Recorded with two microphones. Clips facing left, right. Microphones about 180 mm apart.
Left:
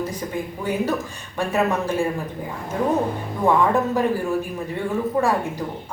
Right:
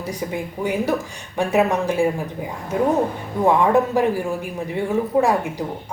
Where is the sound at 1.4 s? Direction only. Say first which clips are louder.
Right 3 dB; 15° right (ahead or behind).